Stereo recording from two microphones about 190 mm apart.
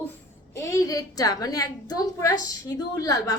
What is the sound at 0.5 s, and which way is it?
A woman's voice, 15° left (ahead or behind).